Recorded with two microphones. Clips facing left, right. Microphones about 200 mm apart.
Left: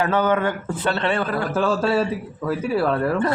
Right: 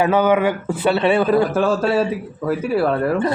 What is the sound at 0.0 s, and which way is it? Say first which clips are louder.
A man's voice: right 4 dB; 10° right (ahead or behind).